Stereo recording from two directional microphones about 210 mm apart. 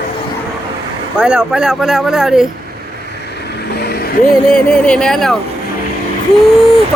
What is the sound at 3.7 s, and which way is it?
Vehicle, 50° left (ahead or behind).